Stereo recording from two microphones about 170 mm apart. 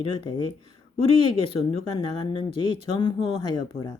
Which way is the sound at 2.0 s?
30° left (ahead or behind).